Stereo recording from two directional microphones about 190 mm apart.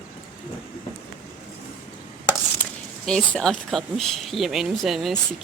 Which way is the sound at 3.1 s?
Centre (ahead or behind).